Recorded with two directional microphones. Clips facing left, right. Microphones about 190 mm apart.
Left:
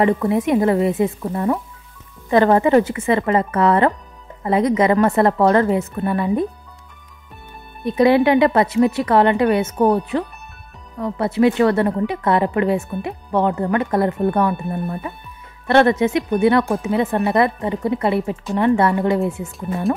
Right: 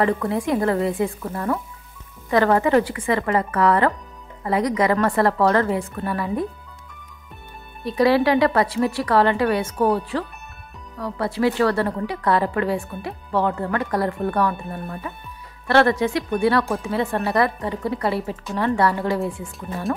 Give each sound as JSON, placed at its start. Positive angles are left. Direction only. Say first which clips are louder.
{"t": 0.0, "sound": "speech", "louder": "left 4 dB", "side_deg": 20}
{"t": 7.8, "sound": "speech", "louder": "left 3 dB", "side_deg": 20}